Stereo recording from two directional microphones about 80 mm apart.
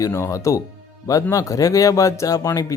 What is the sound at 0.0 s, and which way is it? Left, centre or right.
Speech, left.